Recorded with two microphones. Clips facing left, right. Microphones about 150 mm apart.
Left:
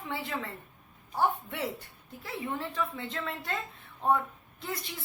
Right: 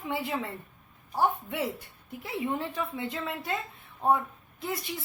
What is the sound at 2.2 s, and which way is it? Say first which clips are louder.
A woman's voice: right 4 dB; 15° right (ahead or behind).